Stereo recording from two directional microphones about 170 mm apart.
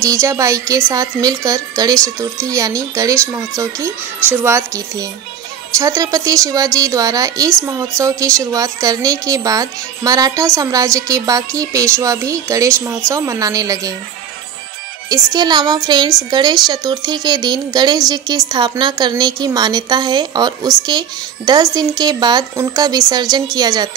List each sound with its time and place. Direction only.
0.0 s speech: 20° right (ahead or behind)
15.0 s speech: 25° right (ahead or behind)